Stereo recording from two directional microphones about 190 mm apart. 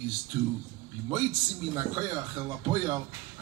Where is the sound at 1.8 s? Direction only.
20° right (ahead or behind).